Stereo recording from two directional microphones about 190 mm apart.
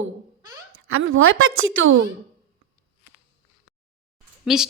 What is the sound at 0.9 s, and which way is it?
A woman's voice, 90° right.